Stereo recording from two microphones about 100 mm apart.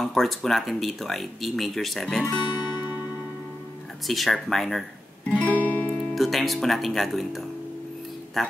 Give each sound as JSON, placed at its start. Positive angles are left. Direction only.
{"t": 0.0, "sound": "speech", "side_deg": 0}
{"t": 2.7, "sound": "music", "side_deg": -20}
{"t": 4.1, "sound": "speech", "side_deg": 0}
{"t": 5.3, "sound": "music", "side_deg": 15}
{"t": 6.1, "sound": "speech", "side_deg": 0}